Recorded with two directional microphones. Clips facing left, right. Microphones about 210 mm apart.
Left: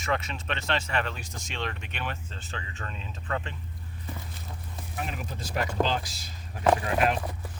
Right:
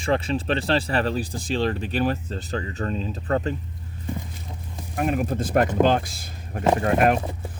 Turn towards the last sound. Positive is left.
turn(degrees=-50)  # may be behind; listen again after turning